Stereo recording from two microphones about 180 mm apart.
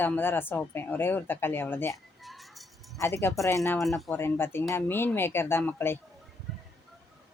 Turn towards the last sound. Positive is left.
turn(degrees=10)  # may be behind; listen again after turning